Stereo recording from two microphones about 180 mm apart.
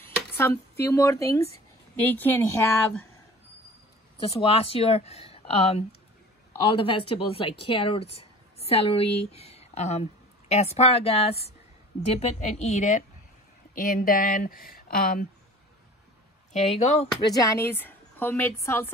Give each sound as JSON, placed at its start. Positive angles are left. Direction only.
{"t": 0.4, "sound": "a woman's voice", "side_deg": 15}
{"t": 4.2, "sound": "speech", "side_deg": 30}
{"t": 16.7, "sound": "speech", "side_deg": 35}
{"t": 17.3, "sound": "a woman's voice", "side_deg": 20}